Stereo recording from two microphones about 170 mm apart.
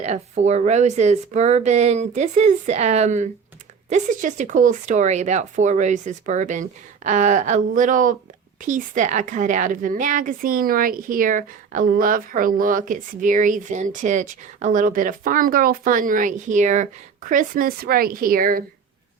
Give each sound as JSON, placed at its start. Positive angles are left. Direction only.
{"t": 0.0, "sound": "a woman's voice", "side_deg": -40}